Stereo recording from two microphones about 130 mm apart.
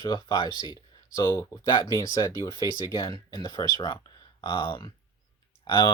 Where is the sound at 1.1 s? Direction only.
25° left (ahead or behind).